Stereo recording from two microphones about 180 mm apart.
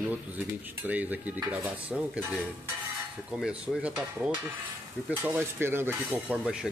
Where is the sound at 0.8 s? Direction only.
10° right (ahead or behind).